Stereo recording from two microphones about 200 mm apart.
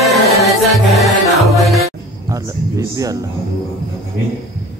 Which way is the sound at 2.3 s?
15° right (ahead or behind).